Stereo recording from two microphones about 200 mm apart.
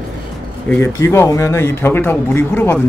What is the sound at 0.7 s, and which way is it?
Speech, 10° left (ahead or behind).